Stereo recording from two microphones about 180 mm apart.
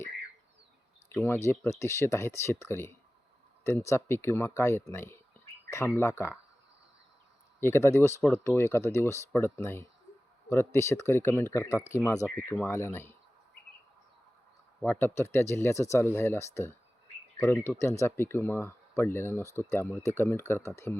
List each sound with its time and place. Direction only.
1.1 s speech: 10° left (ahead or behind)
7.6 s speech: 15° left (ahead or behind)
14.8 s speech: 10° left (ahead or behind)